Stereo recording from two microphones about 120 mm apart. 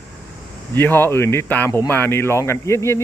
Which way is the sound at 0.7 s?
15° left (ahead or behind).